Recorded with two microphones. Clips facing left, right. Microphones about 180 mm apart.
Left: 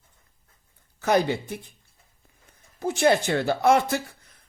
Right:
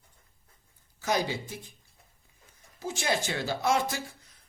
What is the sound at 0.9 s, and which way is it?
Speech, 60° left (ahead or behind).